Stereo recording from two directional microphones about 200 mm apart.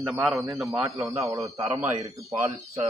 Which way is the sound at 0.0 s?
Centre (ahead or behind).